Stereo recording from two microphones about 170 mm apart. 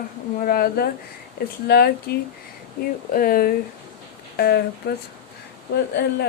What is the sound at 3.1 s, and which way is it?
Speech, 55° left (ahead or behind).